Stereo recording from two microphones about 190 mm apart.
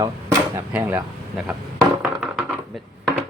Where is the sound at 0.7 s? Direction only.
5° right (ahead or behind).